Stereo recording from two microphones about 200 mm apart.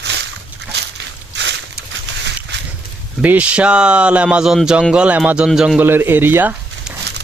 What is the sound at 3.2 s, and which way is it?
Speech, 5° right (ahead or behind).